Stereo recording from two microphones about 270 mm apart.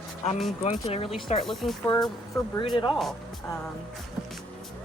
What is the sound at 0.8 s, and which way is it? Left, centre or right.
Speech, left.